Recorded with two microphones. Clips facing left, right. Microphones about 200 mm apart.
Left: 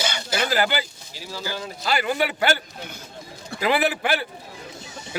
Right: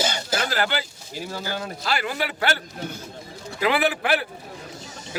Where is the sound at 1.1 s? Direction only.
50° right (ahead or behind).